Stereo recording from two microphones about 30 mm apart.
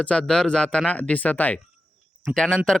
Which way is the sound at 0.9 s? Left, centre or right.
Left.